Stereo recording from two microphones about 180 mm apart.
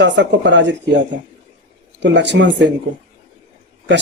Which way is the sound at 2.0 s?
75° right (ahead or behind).